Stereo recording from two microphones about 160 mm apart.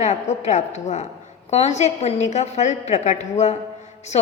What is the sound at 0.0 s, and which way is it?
A woman's voice, 45° left (ahead or behind).